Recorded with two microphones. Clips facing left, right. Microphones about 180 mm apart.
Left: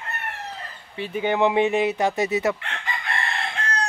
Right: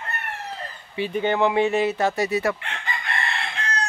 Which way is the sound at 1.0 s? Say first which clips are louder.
Even; 10° left (ahead or behind).